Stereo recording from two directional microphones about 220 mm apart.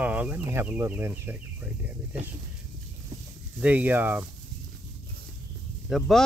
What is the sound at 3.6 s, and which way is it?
Speech, 5° right (ahead or behind).